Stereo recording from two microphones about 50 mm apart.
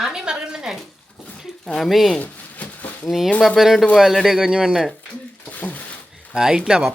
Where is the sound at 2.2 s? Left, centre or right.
Left.